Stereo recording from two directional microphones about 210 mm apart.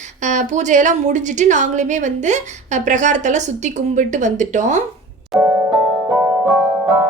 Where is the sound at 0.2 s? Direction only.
35° right (ahead or behind).